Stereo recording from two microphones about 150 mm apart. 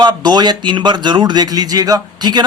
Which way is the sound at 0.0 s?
30° right (ahead or behind).